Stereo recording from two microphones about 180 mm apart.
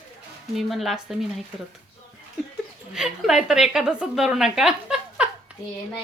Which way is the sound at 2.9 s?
Centre (ahead or behind).